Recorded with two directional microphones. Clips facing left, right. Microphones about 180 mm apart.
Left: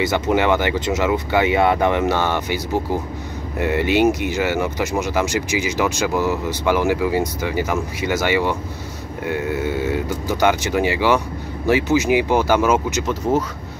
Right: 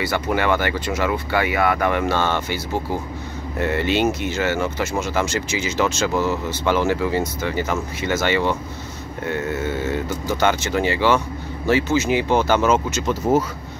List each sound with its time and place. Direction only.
0.0 s speech: 20° left (ahead or behind)